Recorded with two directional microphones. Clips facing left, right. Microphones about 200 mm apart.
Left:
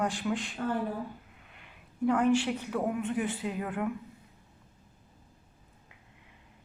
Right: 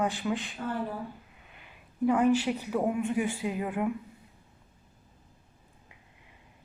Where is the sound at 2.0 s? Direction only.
5° right (ahead or behind).